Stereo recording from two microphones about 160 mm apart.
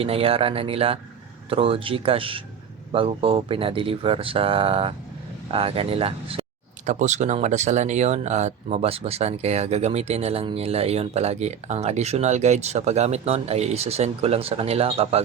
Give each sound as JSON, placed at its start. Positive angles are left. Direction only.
{"t": 0.0, "sound": "speech", "side_deg": -35}
{"t": 6.8, "sound": "speech", "side_deg": -45}